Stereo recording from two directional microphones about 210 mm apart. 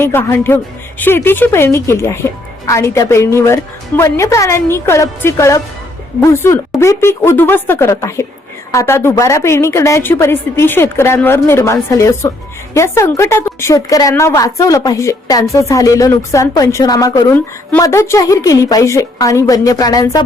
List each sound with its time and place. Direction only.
0.0 s a woman's voice: 10° left (ahead or behind)